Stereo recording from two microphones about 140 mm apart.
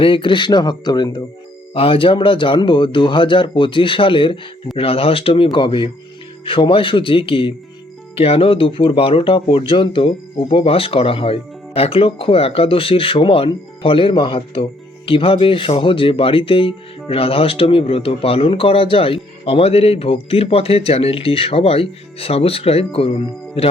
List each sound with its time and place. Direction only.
0.0 s speech: 35° left (ahead or behind)
1.7 s speech: 40° left (ahead or behind)